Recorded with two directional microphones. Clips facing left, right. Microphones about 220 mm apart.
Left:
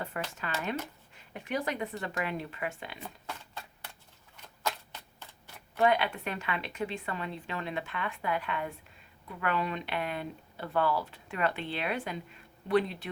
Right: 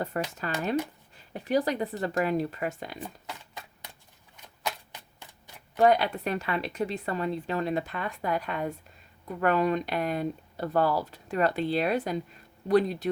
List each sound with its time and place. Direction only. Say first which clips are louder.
0.1 s a woman's voice: right 5 dB; 40° right (ahead or behind)
3.2 s a sound: right 1 dB; 15° right (ahead or behind)
4.6 s shuffling cards: even; 15° right (ahead or behind)
5.7 s a woman's voice: right 5 dB; 40° right (ahead or behind)